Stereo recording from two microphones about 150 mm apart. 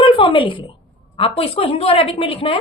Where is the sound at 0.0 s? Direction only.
35° left (ahead or behind).